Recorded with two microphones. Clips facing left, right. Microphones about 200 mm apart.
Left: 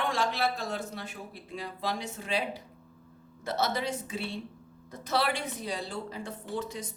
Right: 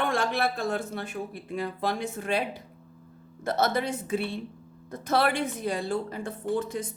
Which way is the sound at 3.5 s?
55° right (ahead or behind).